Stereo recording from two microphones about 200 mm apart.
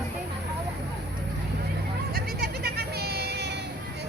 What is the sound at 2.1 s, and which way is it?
Vehicle, 50° right (ahead or behind).